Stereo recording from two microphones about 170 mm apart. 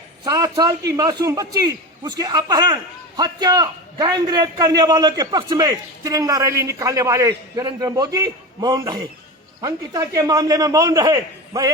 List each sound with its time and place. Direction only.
0.3 s a man's voice: 20° right (ahead or behind)